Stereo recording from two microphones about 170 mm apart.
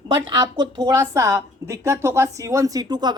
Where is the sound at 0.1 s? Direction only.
25° right (ahead or behind).